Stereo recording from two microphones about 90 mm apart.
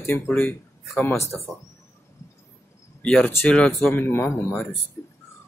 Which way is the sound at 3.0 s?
10° left (ahead or behind).